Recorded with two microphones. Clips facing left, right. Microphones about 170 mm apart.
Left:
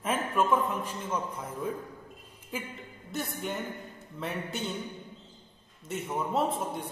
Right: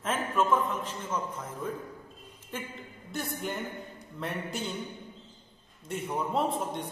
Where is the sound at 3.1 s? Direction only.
Centre (ahead or behind).